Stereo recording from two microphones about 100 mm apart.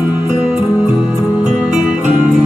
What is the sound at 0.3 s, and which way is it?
Music, 5° right (ahead or behind).